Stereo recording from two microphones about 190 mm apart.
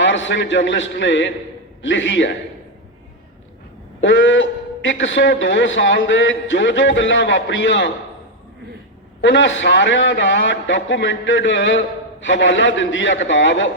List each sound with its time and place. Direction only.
0.0 s a man's voice: 75° left (ahead or behind)
4.0 s a man's voice: 80° left
9.2 s a man's voice: 75° left (ahead or behind)